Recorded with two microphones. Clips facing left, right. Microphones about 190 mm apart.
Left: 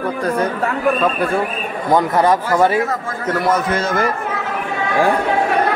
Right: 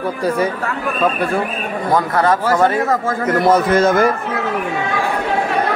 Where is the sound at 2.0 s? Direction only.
15° left (ahead or behind).